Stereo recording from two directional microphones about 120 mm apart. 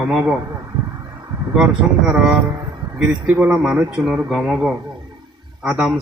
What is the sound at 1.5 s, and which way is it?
Speech, 5° right (ahead or behind).